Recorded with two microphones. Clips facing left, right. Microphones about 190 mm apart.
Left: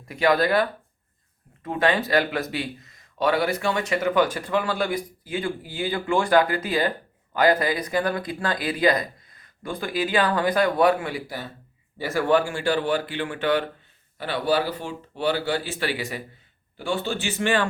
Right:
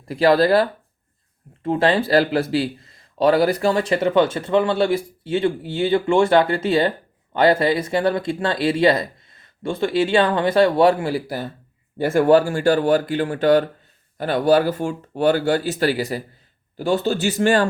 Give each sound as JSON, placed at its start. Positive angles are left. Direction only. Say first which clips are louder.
{"t": 0.0, "sound": "speech", "louder": "right 5 dB", "side_deg": -35}
{"t": 11.9, "sound": "speech", "louder": "right 8 dB", "side_deg": -50}
{"t": 12.3, "sound": "speech", "louder": "right 5 dB", "side_deg": -40}